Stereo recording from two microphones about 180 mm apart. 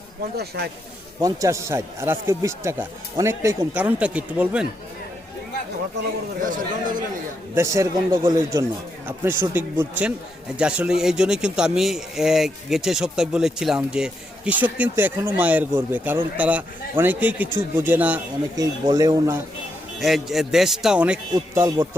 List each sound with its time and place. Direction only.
0.3 s speech: 60° right (ahead or behind)
1.2 s a man's voice: 15° right (ahead or behind)
6.4 s a man's voice: 45° right (ahead or behind)
7.5 s a man's voice: 15° right (ahead or behind)
18.5 s speech: 20° right (ahead or behind)
20.0 s speech: centre (ahead or behind)
21.5 s a man's voice: 15° right (ahead or behind)